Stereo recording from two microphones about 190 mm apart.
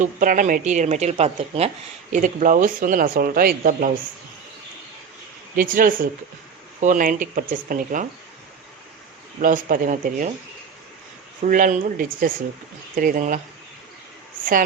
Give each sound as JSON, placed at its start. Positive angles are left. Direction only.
{"t": 0.0, "sound": "a woman's voice", "side_deg": -45}
{"t": 5.5, "sound": "speech", "side_deg": -45}
{"t": 9.4, "sound": "speech", "side_deg": -45}
{"t": 11.4, "sound": "speech", "side_deg": -45}